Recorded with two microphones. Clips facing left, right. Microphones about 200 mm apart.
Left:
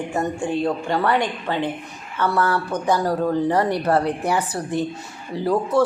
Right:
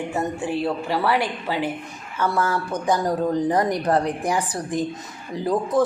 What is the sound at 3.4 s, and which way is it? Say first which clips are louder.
Speech: left 1 dB; 15° right (ahead or behind).